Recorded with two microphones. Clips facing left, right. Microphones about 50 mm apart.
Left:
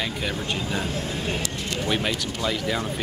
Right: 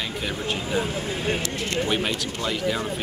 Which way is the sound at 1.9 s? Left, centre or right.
Centre.